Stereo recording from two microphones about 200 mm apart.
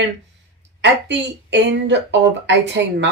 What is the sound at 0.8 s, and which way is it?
A woman's voice, 60° right (ahead or behind).